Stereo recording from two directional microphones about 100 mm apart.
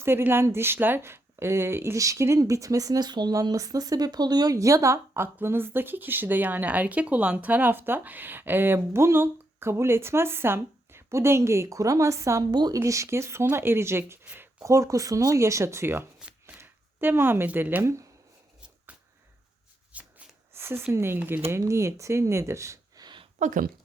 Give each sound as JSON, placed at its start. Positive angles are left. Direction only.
{"t": 0.0, "sound": "speech", "side_deg": -25}
{"t": 12.5, "sound": "a woman's voice", "side_deg": -45}
{"t": 12.8, "sound": "speech", "side_deg": -30}
{"t": 18.9, "sound": "a sound", "side_deg": -10}
{"t": 19.9, "sound": "shuffling cards", "side_deg": -15}
{"t": 20.5, "sound": "a sound", "side_deg": -25}
{"t": 20.9, "sound": "speech", "side_deg": -25}